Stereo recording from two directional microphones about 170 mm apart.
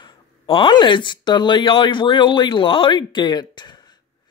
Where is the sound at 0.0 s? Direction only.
25° left (ahead or behind).